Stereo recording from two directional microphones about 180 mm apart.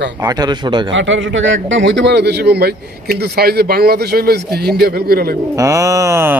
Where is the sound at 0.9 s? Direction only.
90° right; by 5.4 s 55° right (ahead or behind).